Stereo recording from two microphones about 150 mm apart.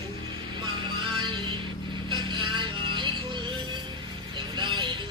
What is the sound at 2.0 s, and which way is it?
Vehicle, 30° right (ahead or behind).